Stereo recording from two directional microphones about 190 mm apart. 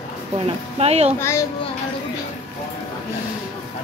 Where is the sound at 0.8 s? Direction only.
35° right (ahead or behind).